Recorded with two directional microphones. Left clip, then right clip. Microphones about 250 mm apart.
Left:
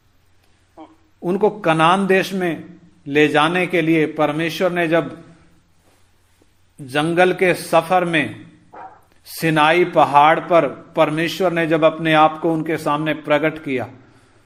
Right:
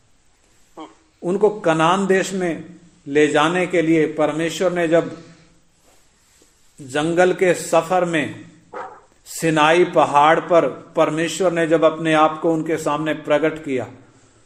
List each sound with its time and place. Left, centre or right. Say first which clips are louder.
0.8 s a sound: right 4 dB; right
1.2 s a man's voice: even; left
6.8 s a man's voice: left 1 dB; centre
8.7 s dog: right 5 dB; right
9.4 s a man's voice: even; centre